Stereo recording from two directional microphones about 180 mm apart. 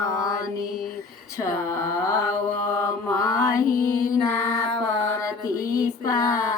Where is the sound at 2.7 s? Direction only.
20° left (ahead or behind).